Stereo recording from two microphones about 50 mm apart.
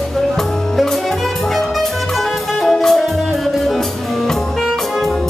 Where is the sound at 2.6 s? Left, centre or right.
Centre.